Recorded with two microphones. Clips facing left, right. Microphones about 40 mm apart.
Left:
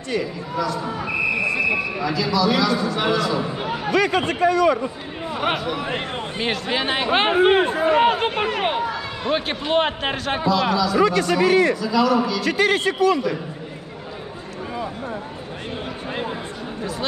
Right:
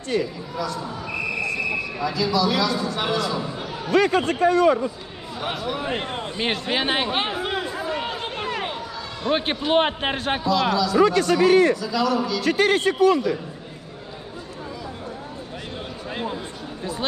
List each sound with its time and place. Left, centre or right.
0.8 s a sound: left
2.0 s speech: centre
3.5 s a sound: left
3.9 s a man's voice: left
5.3 s speech: left
6.4 s speech: right
7.1 s speech: left
9.3 s speech: right
10.5 s speech: centre
11.0 s a man's voice: left
11.8 s speech: centre
12.4 s a man's voice: left
16.1 s speech: centre